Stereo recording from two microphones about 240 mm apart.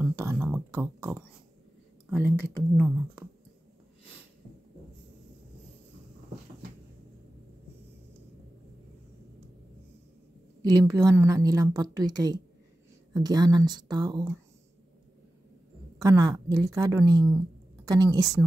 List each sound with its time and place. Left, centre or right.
0.0 s a sound: centre
10.6 s a woman's voice: centre
16.0 s a woman's voice: centre